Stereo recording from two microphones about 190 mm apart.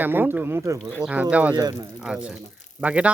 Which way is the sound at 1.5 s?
20° right (ahead or behind).